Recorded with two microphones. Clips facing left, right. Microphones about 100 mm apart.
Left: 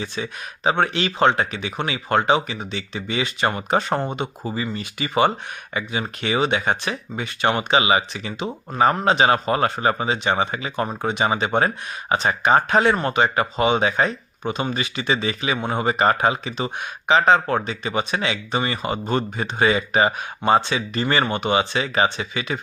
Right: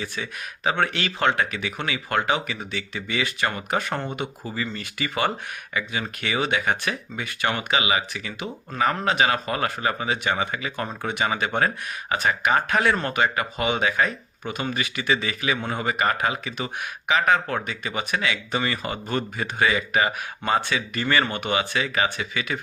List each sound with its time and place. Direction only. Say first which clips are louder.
0.0 s speech: left 3 dB; 25° left (ahead or behind)